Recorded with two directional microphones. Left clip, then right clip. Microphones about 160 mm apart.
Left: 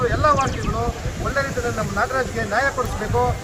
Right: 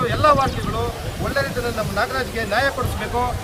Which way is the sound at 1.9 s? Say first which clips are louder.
Left 2 dB; 55° right (ahead or behind).